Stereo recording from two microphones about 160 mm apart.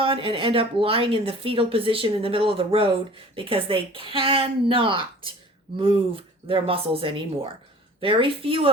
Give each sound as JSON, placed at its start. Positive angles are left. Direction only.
{"t": 0.0, "sound": "speech", "side_deg": -35}